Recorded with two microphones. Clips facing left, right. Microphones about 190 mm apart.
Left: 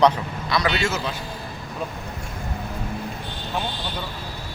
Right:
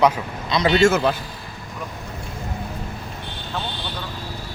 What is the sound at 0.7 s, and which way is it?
Speech, 45° right (ahead or behind).